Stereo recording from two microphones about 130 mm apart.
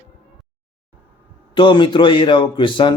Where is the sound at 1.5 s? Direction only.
40° left (ahead or behind).